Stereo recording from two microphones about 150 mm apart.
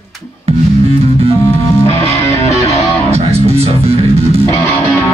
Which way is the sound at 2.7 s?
45° left (ahead or behind).